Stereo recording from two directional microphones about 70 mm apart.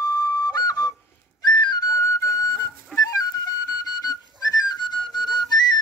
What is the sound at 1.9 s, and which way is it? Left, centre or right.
Music, left.